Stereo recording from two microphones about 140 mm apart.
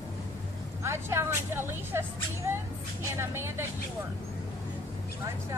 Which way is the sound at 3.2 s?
15° right (ahead or behind).